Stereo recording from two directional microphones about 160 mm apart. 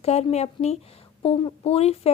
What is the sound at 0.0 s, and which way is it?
Speech, 40° left (ahead or behind).